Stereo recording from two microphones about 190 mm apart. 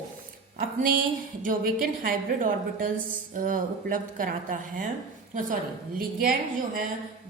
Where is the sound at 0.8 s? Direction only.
45° right (ahead or behind).